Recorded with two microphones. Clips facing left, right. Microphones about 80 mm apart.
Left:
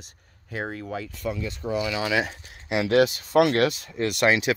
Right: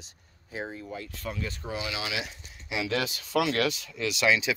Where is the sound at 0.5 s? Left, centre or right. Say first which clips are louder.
Left 5 dB; left.